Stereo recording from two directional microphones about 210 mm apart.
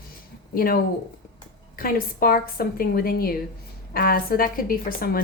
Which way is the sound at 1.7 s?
45° left (ahead or behind).